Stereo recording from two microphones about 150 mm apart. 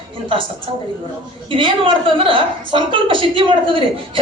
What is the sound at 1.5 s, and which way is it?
A woman's voice, 35° right (ahead or behind).